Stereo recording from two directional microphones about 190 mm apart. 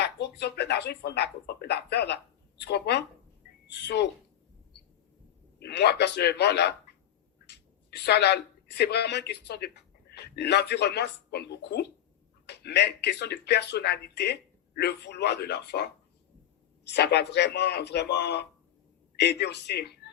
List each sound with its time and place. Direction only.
0.0 s speech: 60° left (ahead or behind)
5.5 s speech: 60° left (ahead or behind)
16.9 s speech: 60° left (ahead or behind)